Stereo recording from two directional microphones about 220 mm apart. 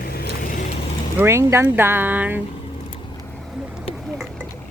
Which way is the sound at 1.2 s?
10° right (ahead or behind).